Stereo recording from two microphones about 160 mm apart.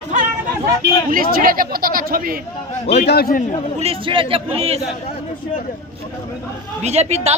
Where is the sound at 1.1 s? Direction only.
65° right (ahead or behind).